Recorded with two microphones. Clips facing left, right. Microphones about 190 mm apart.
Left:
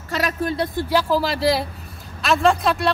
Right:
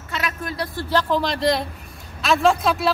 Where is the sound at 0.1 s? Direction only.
35° left (ahead or behind).